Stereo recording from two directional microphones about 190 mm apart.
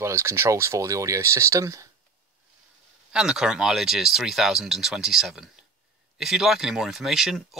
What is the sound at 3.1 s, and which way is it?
Speech, 5° right (ahead or behind).